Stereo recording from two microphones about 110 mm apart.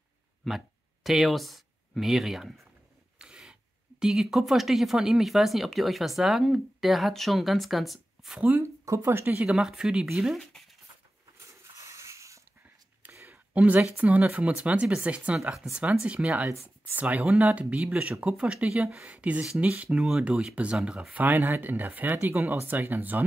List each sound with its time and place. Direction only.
1.0 s speech: centre (ahead or behind)
3.2 s filing: 5° right (ahead or behind)
4.0 s speech: 5° right (ahead or behind)
8.5 s speech: 25° right (ahead or behind)
9.5 s speech: 5° right (ahead or behind)
11.3 s a sound: 25° right (ahead or behind)
13.0 s speech: 15° right (ahead or behind)